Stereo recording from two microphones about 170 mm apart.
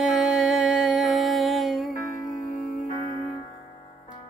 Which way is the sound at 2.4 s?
50° left (ahead or behind).